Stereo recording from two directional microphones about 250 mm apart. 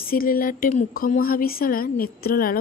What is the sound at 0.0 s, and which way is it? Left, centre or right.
A woman's voice, left.